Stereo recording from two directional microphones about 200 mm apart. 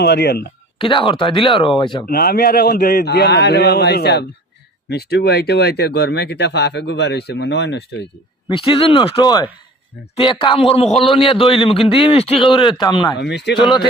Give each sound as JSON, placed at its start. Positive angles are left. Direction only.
{"t": 0.0, "sound": "speech", "side_deg": 55}
{"t": 0.8, "sound": "a man's voice", "side_deg": 25}
{"t": 2.0, "sound": "a man's voice", "side_deg": 50}
{"t": 8.4, "sound": "a man's voice", "side_deg": 25}
{"t": 13.1, "sound": "speech", "side_deg": 60}
{"t": 13.6, "sound": "a man's voice", "side_deg": 25}